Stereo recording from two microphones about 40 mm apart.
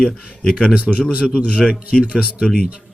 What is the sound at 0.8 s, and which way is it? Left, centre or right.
Speech, right.